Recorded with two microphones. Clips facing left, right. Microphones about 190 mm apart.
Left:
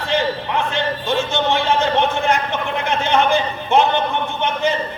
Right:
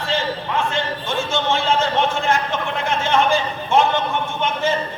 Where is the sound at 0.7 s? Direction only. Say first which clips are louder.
Left 3 dB; 20° left (ahead or behind).